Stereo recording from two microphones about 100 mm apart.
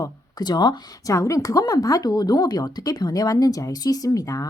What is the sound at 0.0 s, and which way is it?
Speech, 45° left (ahead or behind).